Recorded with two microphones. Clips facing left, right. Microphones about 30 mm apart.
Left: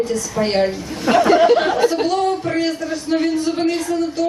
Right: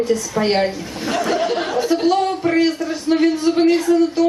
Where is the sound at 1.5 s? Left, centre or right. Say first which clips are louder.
Left 7 dB; left.